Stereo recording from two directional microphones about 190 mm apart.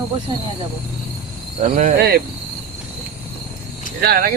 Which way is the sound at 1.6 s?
40° right (ahead or behind).